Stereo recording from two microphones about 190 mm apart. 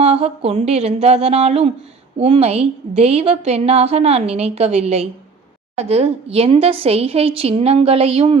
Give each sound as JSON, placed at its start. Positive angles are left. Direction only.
{"t": 0.0, "sound": "a woman's voice", "side_deg": -35}